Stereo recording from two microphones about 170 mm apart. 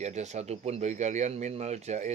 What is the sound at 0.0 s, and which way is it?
Speech, 40° right (ahead or behind).